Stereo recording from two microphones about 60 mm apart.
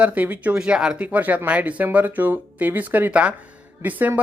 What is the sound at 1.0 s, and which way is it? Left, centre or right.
Speech, right.